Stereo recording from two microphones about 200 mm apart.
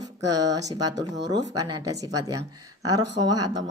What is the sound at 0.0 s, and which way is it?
Speech, 20° right (ahead or behind).